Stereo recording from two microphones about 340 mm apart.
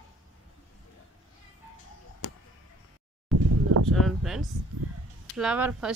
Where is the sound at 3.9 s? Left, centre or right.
Centre.